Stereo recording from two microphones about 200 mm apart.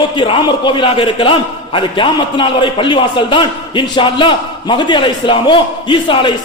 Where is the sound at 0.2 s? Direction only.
25° left (ahead or behind).